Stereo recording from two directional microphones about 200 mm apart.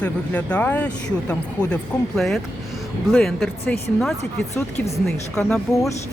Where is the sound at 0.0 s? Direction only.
5° left (ahead or behind).